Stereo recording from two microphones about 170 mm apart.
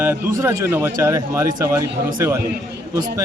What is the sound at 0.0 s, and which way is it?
A man's voice, 15° right (ahead or behind).